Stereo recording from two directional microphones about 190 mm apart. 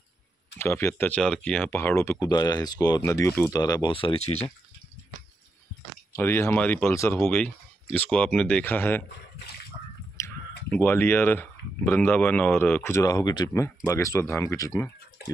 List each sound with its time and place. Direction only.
0.6 s speech: 10° left (ahead or behind); by 4.5 s 35° left (ahead or behind)
6.1 s speech: 10° left (ahead or behind)
10.2 s a sound: 15° left (ahead or behind)
10.7 s speech: 10° left (ahead or behind)